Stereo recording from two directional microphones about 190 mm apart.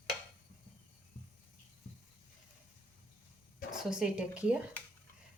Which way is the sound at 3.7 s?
5° right (ahead or behind).